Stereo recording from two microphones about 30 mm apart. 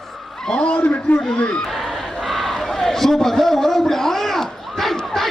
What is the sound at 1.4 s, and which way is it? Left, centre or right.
Speech, left.